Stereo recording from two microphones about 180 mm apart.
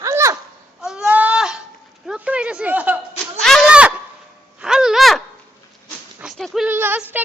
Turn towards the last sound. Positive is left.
turn(degrees=-10)  # may be behind; listen again after turning